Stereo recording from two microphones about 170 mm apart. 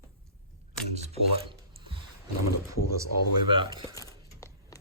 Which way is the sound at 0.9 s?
40° right (ahead or behind).